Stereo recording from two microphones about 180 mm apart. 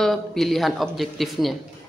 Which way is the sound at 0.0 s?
Centre (ahead or behind).